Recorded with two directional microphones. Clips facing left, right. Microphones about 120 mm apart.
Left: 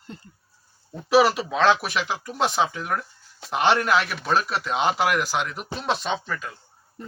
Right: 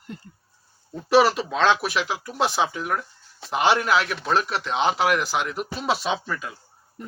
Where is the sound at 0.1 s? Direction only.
30° left (ahead or behind).